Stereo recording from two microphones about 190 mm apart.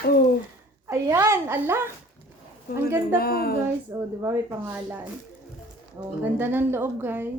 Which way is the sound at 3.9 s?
20° right (ahead or behind).